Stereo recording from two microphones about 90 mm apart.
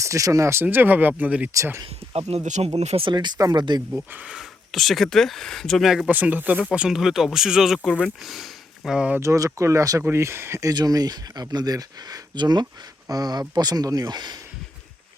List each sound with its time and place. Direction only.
0.0 s speech: 35° right (ahead or behind); by 1.5 s 20° right (ahead or behind)
1.5 s speech: 30° right (ahead or behind)
2.3 s speech: 90° right
3.3 s speech: 45° right (ahead or behind)
3.9 s speech: 15° right (ahead or behind)
4.4 s speech: centre (ahead or behind)
6.1 s speech: 20° right (ahead or behind)
7.9 s speech: 10° left (ahead or behind)
8.2 s sniff: centre (ahead or behind)
9.0 s speech: 15° right (ahead or behind)
9.2 s speech: 35° right (ahead or behind)
10.8 s speech: 45° right (ahead or behind)